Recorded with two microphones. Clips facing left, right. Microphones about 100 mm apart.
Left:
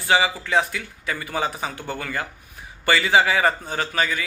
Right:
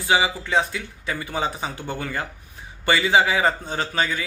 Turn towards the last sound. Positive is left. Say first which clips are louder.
# even
turn(degrees=-25)  # may be behind; listen again after turning